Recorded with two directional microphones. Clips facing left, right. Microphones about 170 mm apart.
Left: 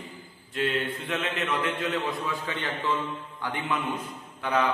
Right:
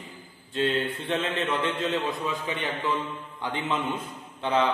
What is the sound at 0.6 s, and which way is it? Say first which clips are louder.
A man's voice: right 2 dB; 30° right (ahead or behind).